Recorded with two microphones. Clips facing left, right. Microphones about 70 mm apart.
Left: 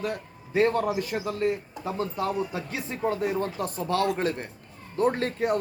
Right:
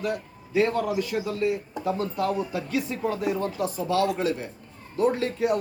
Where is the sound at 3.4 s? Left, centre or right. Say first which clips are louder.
Right 2 dB; left.